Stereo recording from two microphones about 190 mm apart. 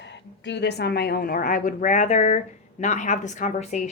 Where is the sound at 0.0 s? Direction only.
65° left (ahead or behind).